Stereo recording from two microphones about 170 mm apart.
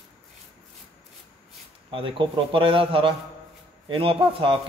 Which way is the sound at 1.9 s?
30° right (ahead or behind).